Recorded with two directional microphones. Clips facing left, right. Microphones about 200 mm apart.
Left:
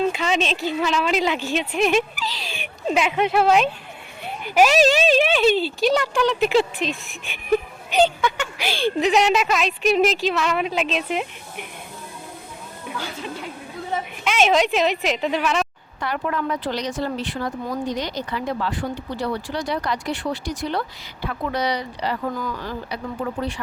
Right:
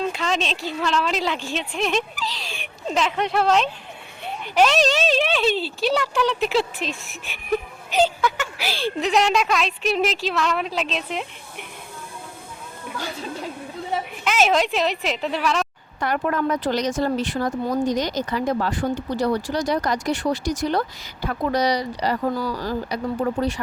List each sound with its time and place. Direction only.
0.1 s speech: 5° left (ahead or behind)
14.3 s speech: centre (ahead or behind)
16.0 s speech: 50° right (ahead or behind)